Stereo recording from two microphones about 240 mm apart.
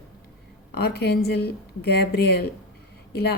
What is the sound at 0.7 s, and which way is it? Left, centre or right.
A woman's voice, left.